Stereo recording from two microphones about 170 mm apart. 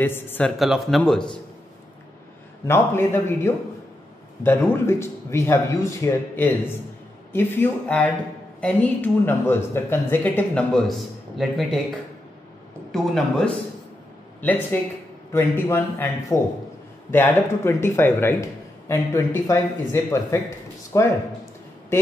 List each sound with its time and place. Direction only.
0.0 s a man's voice: 10° left (ahead or behind)
0.6 s speech: centre (ahead or behind)
2.6 s a man's voice: 15° left (ahead or behind)
12.9 s a man's voice: 5° left (ahead or behind)